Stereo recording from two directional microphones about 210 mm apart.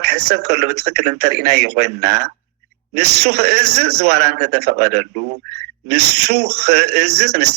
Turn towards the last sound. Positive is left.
turn(degrees=-50)  # may be behind; listen again after turning